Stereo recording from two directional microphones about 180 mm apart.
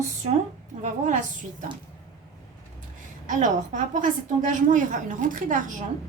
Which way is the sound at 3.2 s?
45° right (ahead or behind).